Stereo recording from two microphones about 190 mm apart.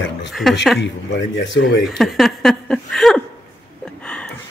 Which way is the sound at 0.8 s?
70° left (ahead or behind).